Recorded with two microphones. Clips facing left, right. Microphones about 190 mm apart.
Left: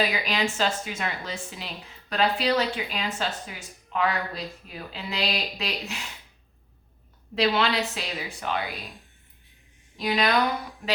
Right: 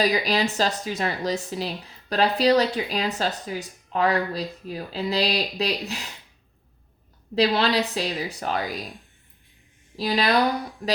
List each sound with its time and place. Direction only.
0.0 s speech: 35° right (ahead or behind)
7.3 s speech: 35° right (ahead or behind)
10.0 s speech: 35° right (ahead or behind)